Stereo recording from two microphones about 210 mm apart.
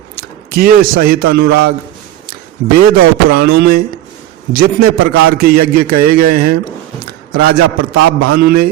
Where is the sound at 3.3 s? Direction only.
45° right (ahead or behind).